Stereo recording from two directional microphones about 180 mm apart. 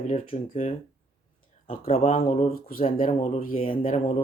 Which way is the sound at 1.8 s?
40° left (ahead or behind).